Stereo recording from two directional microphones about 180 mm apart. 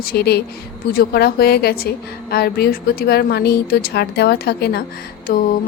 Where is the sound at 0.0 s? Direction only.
60° left (ahead or behind).